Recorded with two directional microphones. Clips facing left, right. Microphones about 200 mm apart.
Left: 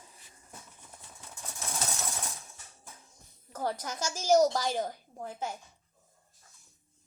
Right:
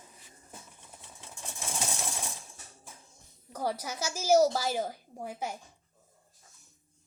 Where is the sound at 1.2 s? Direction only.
25° right (ahead or behind).